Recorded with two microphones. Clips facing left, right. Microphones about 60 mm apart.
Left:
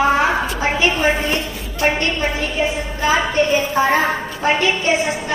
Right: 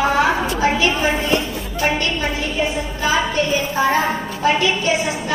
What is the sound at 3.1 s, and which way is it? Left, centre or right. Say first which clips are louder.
Speech: left 3 dB; left.